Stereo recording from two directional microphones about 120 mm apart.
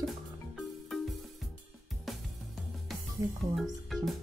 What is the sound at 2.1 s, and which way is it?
Music, centre (ahead or behind).